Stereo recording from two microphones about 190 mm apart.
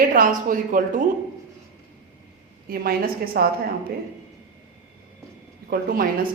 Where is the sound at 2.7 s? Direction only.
50° right (ahead or behind).